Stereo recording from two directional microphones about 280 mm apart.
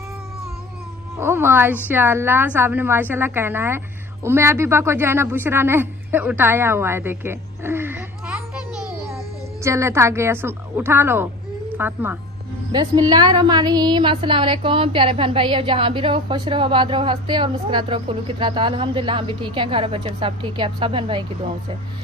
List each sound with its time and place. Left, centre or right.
1.1 s a woman's voice: centre
9.6 s a woman's voice: centre